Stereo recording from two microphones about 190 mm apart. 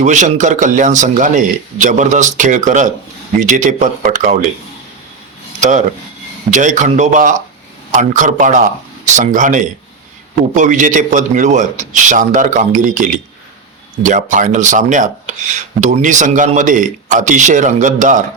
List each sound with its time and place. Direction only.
0.0 s speech: 40° right (ahead or behind)
6.5 s speech: 40° right (ahead or behind)